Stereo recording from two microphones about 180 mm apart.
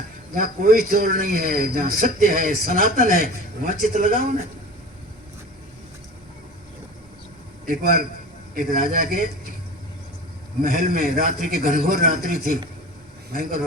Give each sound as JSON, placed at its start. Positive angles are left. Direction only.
{"t": 0.3, "sound": "a man's voice", "side_deg": -50}
{"t": 7.7, "sound": "a man's voice", "side_deg": -50}
{"t": 10.6, "sound": "a man's voice", "side_deg": -50}
{"t": 13.3, "sound": "a man's voice", "side_deg": -50}